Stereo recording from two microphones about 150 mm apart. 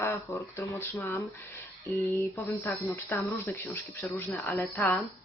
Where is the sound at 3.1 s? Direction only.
15° left (ahead or behind).